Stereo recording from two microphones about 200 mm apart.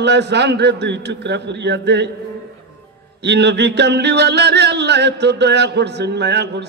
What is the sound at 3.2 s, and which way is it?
Mantra, 60° right (ahead or behind).